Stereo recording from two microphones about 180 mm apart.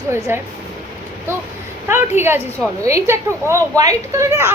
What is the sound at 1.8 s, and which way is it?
A woman's voice, 15° right (ahead or behind).